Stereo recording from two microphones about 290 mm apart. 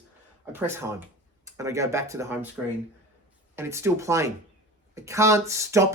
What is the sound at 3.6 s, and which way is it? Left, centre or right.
Speech, centre.